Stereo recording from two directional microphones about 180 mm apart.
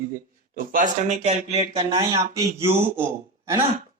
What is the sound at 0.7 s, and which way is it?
Speech, 45° right (ahead or behind).